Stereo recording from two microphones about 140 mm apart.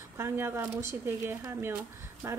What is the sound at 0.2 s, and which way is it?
A woman's voice, 20° right (ahead or behind).